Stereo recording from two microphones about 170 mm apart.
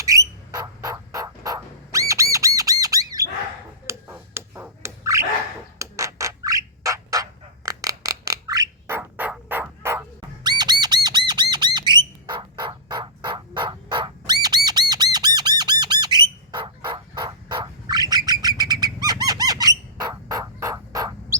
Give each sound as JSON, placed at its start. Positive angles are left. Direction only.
{"t": 0.0, "sound": "a sound", "side_deg": -20}
{"t": 2.6, "sound": "squawk", "side_deg": -20}
{"t": 3.8, "sound": "finger snapping", "side_deg": -15}
{"t": 5.8, "sound": "bird", "side_deg": -20}
{"t": 11.5, "sound": "squawk", "side_deg": -25}
{"t": 18.3, "sound": "bird", "side_deg": -25}